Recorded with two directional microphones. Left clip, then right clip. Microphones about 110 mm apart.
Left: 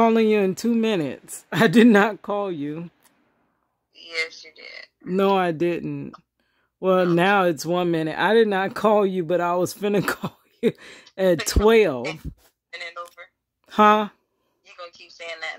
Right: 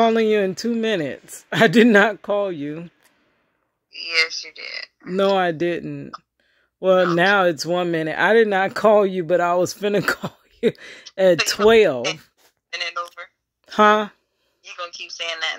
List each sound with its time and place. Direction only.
0.0 s speech: 40° left (ahead or behind)
3.9 s speech: 30° right (ahead or behind)
5.1 s speech: 35° left (ahead or behind); by 12.0 s 20° left (ahead or behind)
12.6 s telephone: 40° right (ahead or behind)
13.7 s speech: 25° left (ahead or behind)
14.7 s speech: 40° right (ahead or behind)